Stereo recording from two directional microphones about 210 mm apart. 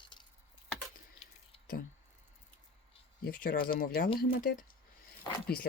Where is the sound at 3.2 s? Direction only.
45° left (ahead or behind).